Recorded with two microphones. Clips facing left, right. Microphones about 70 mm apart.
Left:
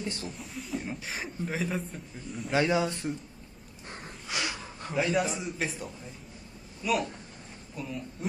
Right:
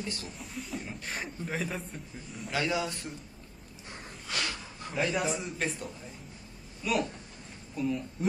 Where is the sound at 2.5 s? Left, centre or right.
Left.